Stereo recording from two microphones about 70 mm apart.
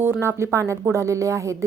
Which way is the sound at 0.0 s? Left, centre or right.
Right.